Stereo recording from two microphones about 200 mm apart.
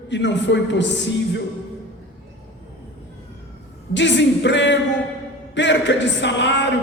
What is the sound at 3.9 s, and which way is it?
Speech, 60° left (ahead or behind).